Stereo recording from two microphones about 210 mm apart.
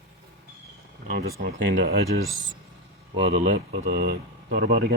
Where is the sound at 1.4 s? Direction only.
50° right (ahead or behind).